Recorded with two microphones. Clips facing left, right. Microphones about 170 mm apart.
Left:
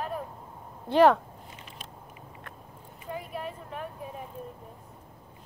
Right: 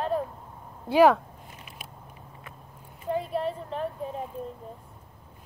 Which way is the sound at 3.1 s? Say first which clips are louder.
Right 8 dB; 30° right (ahead or behind).